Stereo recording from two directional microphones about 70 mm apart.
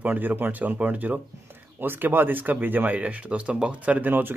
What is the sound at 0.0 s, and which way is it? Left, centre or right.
Speech, right.